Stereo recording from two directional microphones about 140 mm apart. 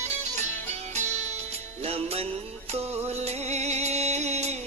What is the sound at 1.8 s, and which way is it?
Music, 45° right (ahead or behind).